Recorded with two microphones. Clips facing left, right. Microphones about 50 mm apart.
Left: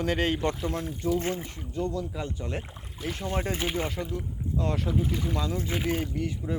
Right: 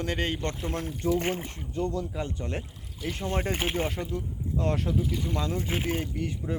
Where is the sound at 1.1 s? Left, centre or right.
Right.